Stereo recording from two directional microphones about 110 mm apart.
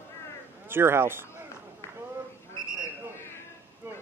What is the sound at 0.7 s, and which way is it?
Speech, 20° right (ahead or behind).